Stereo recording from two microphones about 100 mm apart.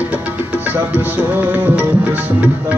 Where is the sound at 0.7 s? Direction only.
20° right (ahead or behind).